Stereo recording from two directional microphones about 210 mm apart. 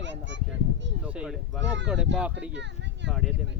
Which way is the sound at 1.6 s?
55° right (ahead or behind).